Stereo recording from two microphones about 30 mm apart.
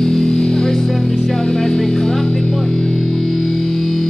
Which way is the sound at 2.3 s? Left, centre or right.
Left.